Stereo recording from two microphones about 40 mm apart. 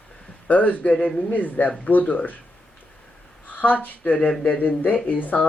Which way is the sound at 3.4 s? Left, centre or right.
Left.